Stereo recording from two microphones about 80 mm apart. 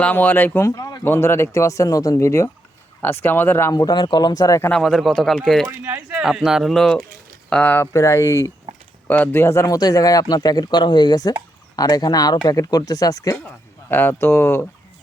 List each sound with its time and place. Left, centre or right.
0.0 s speech: left
0.8 s a sound: left
1.0 s speech: left
3.7 s speech: left
4.8 s speech: centre
6.1 s speech: centre
7.5 s speech: left
7.9 s speech: left
9.0 s speech: left
9.4 s speech: left
13.9 s speech: left